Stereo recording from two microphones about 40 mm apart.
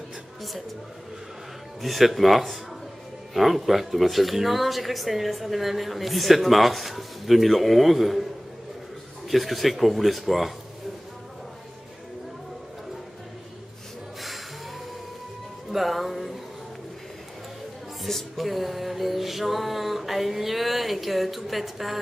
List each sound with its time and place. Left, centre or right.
1.8 s speech: centre
9.3 s speech: centre
15.7 s speech: centre
18.0 s speech: centre